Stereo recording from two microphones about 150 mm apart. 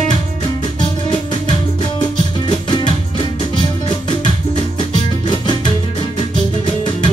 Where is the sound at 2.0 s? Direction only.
30° left (ahead or behind).